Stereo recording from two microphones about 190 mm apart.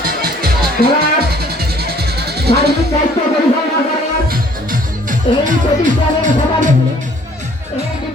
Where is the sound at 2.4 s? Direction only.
55° right (ahead or behind).